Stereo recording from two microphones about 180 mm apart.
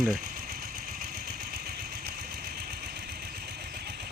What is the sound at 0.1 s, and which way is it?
Engine, 50° right (ahead or behind).